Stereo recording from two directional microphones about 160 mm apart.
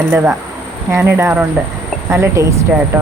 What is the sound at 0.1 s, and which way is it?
Speech, 10° right (ahead or behind).